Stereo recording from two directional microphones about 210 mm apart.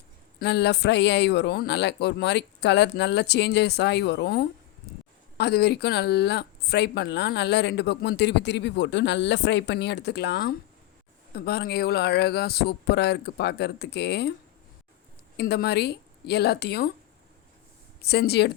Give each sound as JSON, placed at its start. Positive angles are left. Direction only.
{"t": 0.3, "sound": "speech", "side_deg": 55}
{"t": 15.4, "sound": "speech", "side_deg": 50}
{"t": 18.0, "sound": "speech", "side_deg": 50}